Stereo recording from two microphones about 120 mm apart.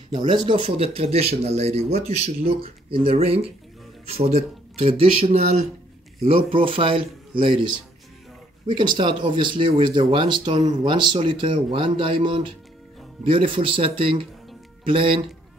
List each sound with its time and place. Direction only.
0.1 s speech: 40° right (ahead or behind)